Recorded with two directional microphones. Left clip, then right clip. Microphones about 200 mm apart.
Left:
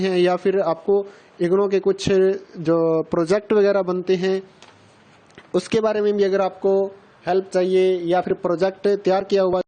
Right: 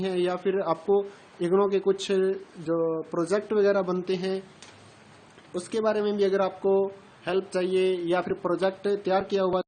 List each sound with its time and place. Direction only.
0.0 s speech: 40° left (ahead or behind)
5.5 s a man's voice: 50° left (ahead or behind)
6.6 s speech: 25° left (ahead or behind)